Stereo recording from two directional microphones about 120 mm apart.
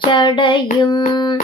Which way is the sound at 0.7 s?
40° left (ahead or behind).